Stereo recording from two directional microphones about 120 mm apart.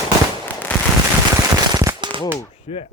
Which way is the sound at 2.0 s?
40° right (ahead or behind).